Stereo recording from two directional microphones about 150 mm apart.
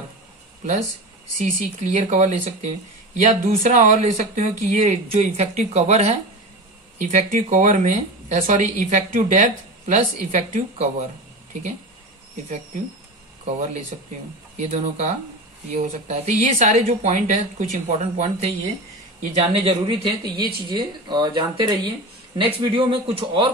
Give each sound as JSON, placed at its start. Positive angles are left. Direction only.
{"t": 1.4, "sound": "speech", "side_deg": -50}
{"t": 14.6, "sound": "speech", "side_deg": -50}